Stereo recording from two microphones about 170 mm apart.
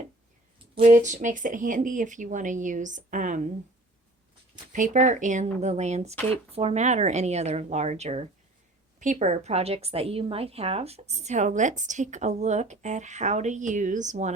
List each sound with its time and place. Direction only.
0.9 s a woman's voice: 45° right (ahead or behind)
4.7 s a woman's voice: 50° right (ahead or behind)